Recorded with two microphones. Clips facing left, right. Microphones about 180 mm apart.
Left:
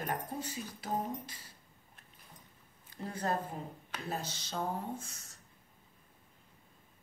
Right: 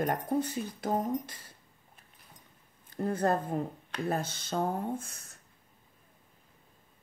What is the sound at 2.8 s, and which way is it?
A woman's voice, 50° right (ahead or behind).